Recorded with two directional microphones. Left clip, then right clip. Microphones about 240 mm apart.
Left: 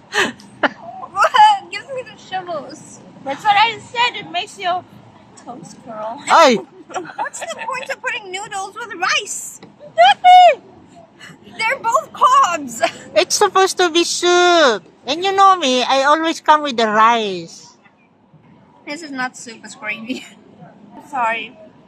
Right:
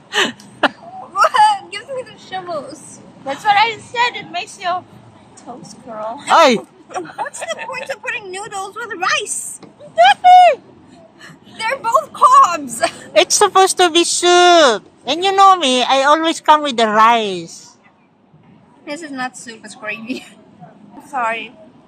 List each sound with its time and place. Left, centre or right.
0.1 s a sound: centre
1.1 s a sound: centre
3.3 s speech: centre
7.3 s speech: centre
7.9 s a woman's voice: centre
9.9 s speech: centre
11.2 s a woman's voice: centre
13.1 s speech: centre
18.9 s a woman's voice: centre
21.1 s speech: centre